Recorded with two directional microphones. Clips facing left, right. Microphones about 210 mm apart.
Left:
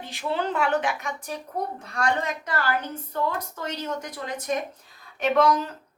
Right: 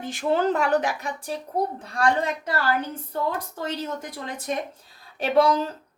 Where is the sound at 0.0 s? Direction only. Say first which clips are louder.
Right 5 dB; 50° right (ahead or behind); by 2.0 s 30° right (ahead or behind).